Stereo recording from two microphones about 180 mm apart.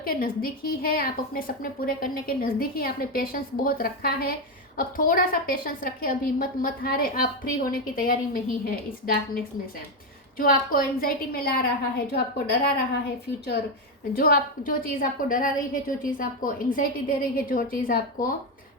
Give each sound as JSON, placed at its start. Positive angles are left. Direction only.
{"t": 0.0, "sound": "a woman's voice", "side_deg": 55}
{"t": 14.1, "sound": "a woman's voice", "side_deg": 55}